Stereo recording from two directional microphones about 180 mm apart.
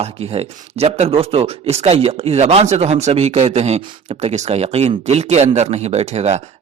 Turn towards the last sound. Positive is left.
turn(degrees=-40)  # may be behind; listen again after turning